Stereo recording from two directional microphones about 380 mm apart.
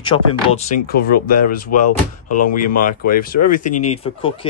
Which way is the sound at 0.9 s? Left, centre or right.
Left.